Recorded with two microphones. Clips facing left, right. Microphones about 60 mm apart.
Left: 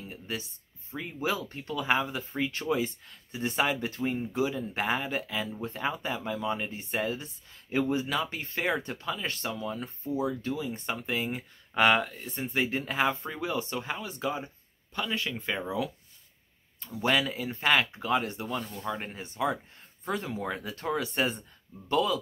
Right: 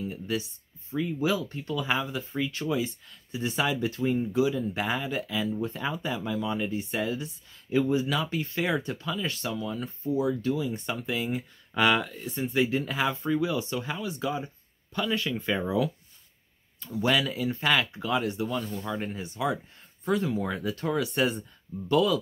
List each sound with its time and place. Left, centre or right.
0.9 s speech: left; by 15.6 s centre
17.0 s speech: left
18.7 s speech: centre